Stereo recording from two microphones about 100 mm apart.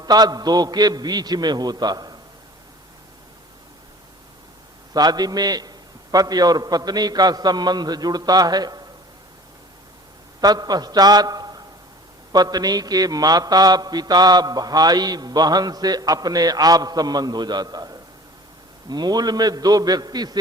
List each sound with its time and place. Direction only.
0.0 s a man's voice: 40° right (ahead or behind)
4.9 s a man's voice: 40° right (ahead or behind)
10.4 s a man's voice: 40° right (ahead or behind)